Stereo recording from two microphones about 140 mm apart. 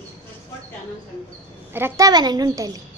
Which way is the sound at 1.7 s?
20° right (ahead or behind).